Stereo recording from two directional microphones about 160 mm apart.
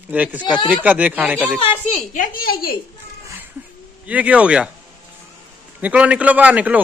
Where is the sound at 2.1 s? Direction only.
60° left (ahead or behind).